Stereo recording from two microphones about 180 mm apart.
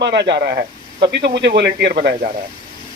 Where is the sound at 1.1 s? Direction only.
70° right (ahead or behind).